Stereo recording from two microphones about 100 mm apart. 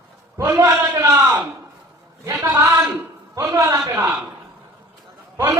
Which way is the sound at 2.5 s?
30° right (ahead or behind).